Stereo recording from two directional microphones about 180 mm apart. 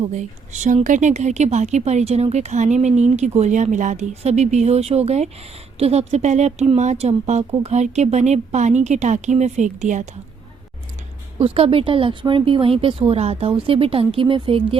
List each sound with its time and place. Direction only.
0.0 s a woman's voice: 40° right (ahead or behind)
11.3 s a woman's voice: 35° right (ahead or behind)